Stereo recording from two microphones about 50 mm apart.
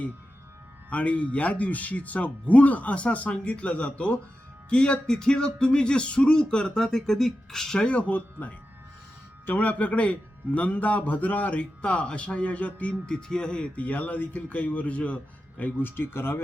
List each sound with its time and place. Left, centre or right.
0.9 s speech: left; by 7.9 s centre
7.9 s speech: left
13.7 s speech: left
15.8 s speech: left